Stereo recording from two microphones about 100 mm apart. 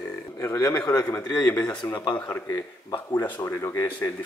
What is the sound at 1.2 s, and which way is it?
Speech, 15° left (ahead or behind).